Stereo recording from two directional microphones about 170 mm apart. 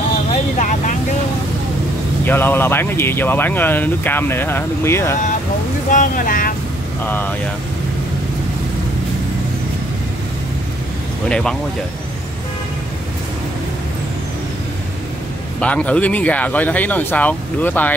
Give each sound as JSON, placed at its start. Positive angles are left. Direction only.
{"t": 0.3, "sound": "vehicle", "side_deg": 50}
{"t": 2.2, "sound": "speech", "side_deg": 10}
{"t": 5.9, "sound": "speech", "side_deg": 50}
{"t": 7.1, "sound": "speech", "side_deg": 10}
{"t": 11.2, "sound": "speech", "side_deg": 5}
{"t": 15.6, "sound": "speech", "side_deg": 5}